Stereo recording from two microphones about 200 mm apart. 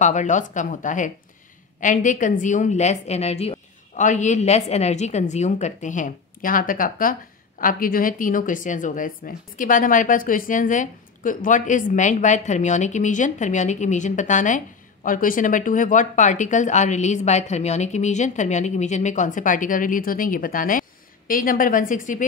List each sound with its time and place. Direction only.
0.0 s a woman's voice: 40° left (ahead or behind)